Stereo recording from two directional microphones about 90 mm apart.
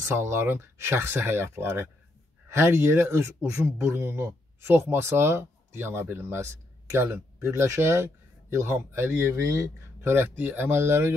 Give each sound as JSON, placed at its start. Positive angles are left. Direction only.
{"t": 0.0, "sound": "speech", "side_deg": -30}